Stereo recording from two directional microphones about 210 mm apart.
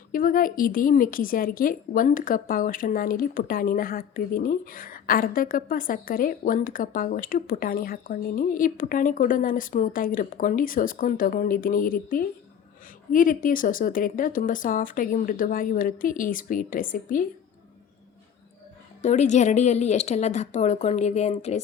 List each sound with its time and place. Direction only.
0.1 s a woman's voice: 40° left (ahead or behind)
19.0 s a woman's voice: 35° left (ahead or behind)